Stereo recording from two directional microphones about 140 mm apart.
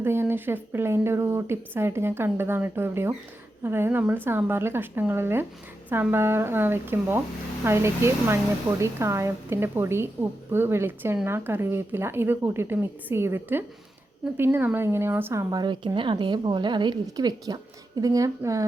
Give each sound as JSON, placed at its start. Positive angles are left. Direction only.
{"t": 0.0, "sound": "a woman's voice", "side_deg": -15}